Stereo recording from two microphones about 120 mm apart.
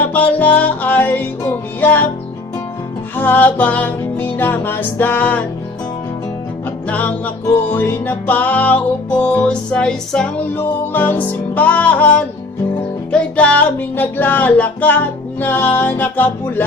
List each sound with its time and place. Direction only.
0.1 s music: 10° left (ahead or behind)
3.2 s music: 15° left (ahead or behind)
6.8 s music: 10° left (ahead or behind)
10.6 s music: 15° left (ahead or behind)